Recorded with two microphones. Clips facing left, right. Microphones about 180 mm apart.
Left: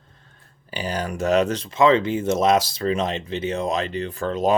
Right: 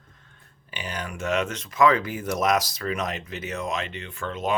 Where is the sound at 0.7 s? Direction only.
35° left (ahead or behind).